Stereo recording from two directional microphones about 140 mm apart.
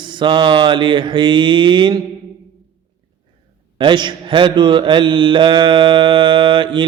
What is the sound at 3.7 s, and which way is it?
Mantra, 35° right (ahead or behind).